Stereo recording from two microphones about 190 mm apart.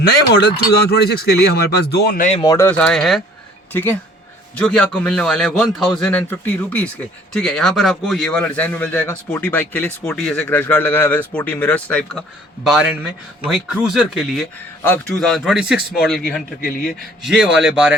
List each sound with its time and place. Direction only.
0.3 s speech: 60° left (ahead or behind)
2.4 s speech: 20° left (ahead or behind)
2.6 s a man's voice: 5° left (ahead or behind)
16.6 s a man's voice: 50° left (ahead or behind)
17.2 s a man's voice: 5° right (ahead or behind)